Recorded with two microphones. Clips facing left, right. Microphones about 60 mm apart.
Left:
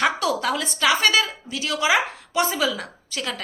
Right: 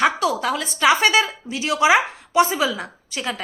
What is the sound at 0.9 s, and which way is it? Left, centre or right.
Speech, centre.